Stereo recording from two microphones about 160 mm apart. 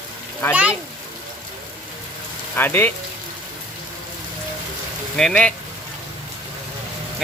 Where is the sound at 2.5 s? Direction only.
10° left (ahead or behind).